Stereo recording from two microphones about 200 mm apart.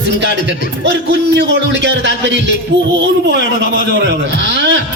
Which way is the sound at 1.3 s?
60° right (ahead or behind).